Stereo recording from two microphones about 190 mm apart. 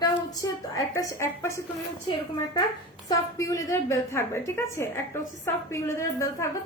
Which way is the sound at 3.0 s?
20° left (ahead or behind).